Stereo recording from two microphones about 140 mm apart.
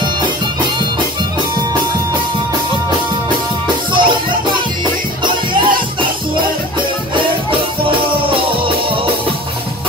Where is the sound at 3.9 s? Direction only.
35° right (ahead or behind).